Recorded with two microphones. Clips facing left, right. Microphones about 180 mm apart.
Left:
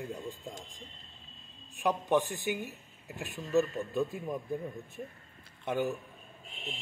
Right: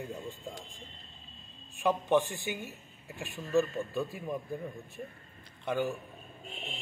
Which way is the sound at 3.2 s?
20° left (ahead or behind).